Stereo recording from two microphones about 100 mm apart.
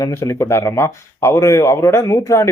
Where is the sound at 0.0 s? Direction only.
30° left (ahead or behind).